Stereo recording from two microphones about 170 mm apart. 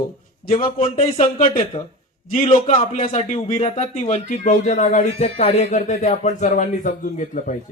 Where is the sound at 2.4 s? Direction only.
30° left (ahead or behind); by 7.6 s 50° left (ahead or behind).